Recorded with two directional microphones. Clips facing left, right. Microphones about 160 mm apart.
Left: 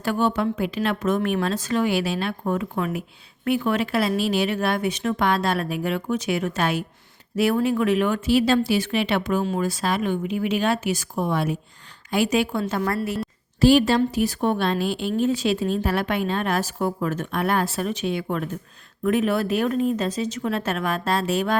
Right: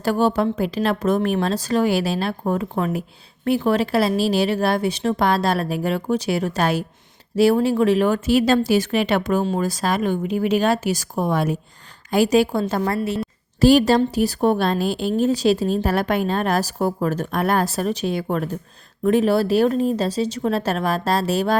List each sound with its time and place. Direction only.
0.0 s speech: 35° right (ahead or behind)
12.8 s a woman's voice: 25° right (ahead or behind)
13.6 s speech: 40° right (ahead or behind)